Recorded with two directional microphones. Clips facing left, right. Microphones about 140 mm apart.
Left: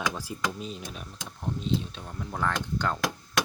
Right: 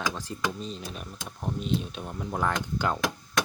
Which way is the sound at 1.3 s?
15° right (ahead or behind).